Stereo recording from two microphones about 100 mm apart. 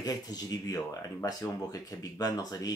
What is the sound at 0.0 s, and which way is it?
Speech, 40° left (ahead or behind).